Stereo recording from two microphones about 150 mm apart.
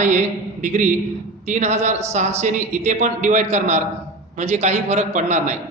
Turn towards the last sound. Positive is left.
turn(degrees=-55)  # may be behind; listen again after turning